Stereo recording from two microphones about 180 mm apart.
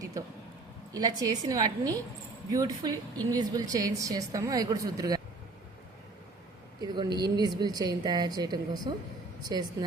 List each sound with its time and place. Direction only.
0.9 s a woman's voice: 20° right (ahead or behind)
6.8 s a woman's voice: 25° right (ahead or behind)